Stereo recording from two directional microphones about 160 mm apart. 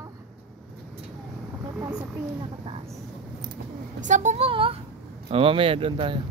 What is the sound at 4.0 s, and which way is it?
Vehicle, 50° right (ahead or behind).